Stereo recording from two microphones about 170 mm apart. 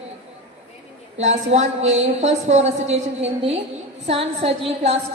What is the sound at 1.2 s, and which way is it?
A woman's voice, 40° right (ahead or behind).